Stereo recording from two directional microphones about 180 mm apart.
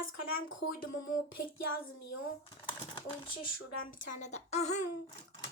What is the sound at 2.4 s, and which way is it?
Speech, 30° left (ahead or behind).